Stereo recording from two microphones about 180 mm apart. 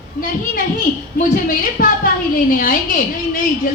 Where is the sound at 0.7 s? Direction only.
50° left (ahead or behind).